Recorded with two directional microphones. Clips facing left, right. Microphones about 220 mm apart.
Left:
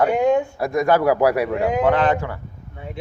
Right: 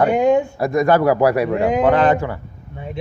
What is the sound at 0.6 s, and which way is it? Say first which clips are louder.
Speech: right 3 dB; 5° left (ahead or behind).